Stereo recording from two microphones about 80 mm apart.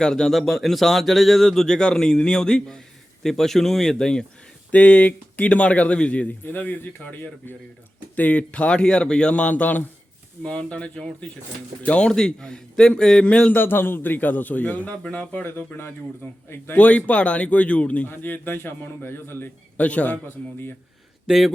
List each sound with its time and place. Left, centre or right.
0.0 s speech: centre
13.6 s a man's voice: left
16.7 s speech: centre
19.8 s speech: centre
20.2 s a man's voice: left
21.2 s a man's voice: centre